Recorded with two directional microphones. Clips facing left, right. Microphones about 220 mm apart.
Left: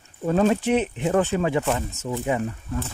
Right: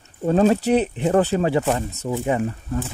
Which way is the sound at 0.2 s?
35° right (ahead or behind).